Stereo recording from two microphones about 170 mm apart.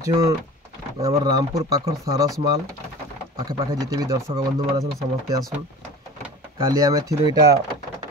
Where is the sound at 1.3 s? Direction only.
20° right (ahead or behind).